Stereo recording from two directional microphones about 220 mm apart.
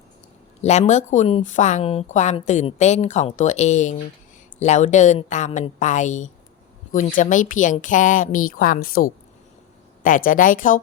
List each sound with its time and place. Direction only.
0.6 s a woman's voice: 30° left (ahead or behind)